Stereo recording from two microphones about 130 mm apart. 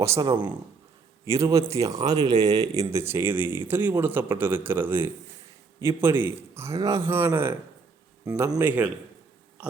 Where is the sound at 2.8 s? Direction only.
20° right (ahead or behind).